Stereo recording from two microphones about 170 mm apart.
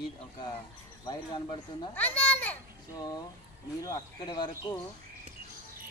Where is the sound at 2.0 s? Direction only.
10° left (ahead or behind).